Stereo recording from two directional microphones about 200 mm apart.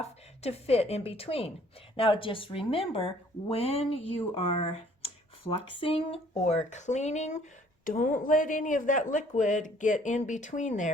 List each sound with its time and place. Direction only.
0.0 s speech: 30° left (ahead or behind)